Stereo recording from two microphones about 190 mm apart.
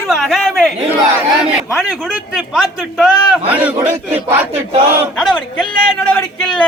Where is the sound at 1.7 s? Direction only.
Centre (ahead or behind).